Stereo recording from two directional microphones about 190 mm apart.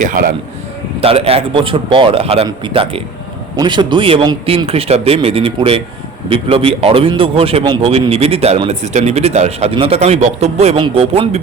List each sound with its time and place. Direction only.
0.0 s a man's voice: 45° right (ahead or behind)
1.0 s a man's voice: 30° right (ahead or behind)